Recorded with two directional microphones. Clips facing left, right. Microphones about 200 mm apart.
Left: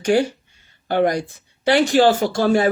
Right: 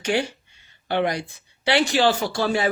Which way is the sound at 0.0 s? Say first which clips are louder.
Left 6 dB; 45° left (ahead or behind).